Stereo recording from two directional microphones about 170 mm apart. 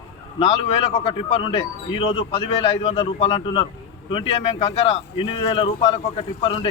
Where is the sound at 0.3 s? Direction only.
35° left (ahead or behind).